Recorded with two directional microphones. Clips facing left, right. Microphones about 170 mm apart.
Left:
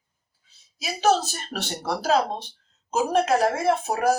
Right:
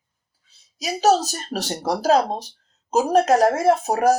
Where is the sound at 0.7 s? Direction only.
40° right (ahead or behind).